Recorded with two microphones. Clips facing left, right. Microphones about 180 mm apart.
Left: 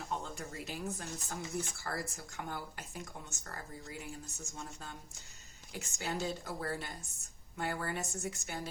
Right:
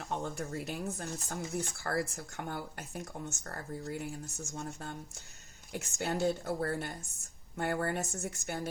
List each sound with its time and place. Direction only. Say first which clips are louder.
0.1 s speech: right 6 dB; 60° right (ahead or behind)